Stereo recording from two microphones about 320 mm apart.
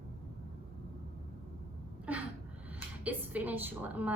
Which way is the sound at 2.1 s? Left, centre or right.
Centre.